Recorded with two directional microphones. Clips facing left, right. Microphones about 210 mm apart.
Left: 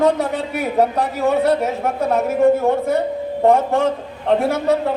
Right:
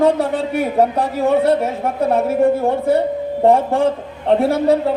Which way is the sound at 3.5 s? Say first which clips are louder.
Right 1 dB; 30° right (ahead or behind).